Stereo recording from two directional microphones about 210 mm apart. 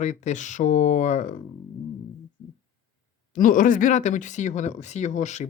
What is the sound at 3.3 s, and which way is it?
Speech, 40° left (ahead or behind).